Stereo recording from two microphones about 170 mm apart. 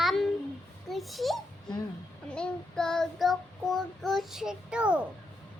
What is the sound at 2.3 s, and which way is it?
Child singing, 5° left (ahead or behind).